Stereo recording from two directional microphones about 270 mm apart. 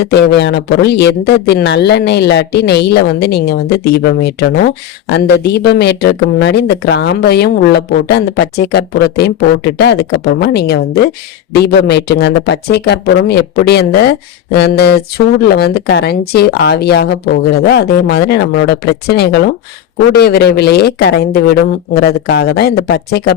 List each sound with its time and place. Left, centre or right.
0.1 s a man's voice: left